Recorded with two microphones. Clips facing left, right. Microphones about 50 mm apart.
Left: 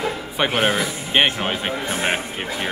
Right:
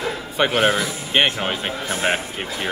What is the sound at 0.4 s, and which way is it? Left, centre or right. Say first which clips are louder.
Speech: right 2 dB; centre.